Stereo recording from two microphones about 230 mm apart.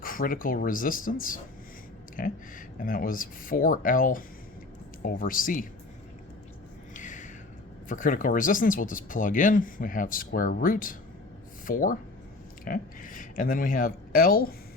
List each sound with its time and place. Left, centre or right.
0.0 s speech: left
6.9 s a sound: left
7.9 s speech: left